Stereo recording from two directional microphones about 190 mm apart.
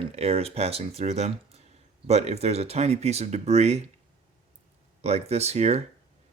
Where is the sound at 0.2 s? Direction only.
30° right (ahead or behind).